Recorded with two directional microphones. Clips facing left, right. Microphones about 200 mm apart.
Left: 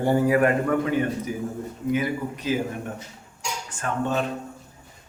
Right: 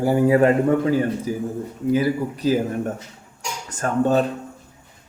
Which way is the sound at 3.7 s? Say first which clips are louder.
Right 7 dB; 40° right (ahead or behind).